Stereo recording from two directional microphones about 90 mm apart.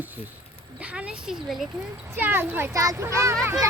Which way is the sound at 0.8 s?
15° right (ahead or behind).